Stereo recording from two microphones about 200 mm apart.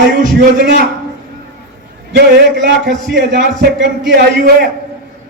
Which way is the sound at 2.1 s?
55° right (ahead or behind).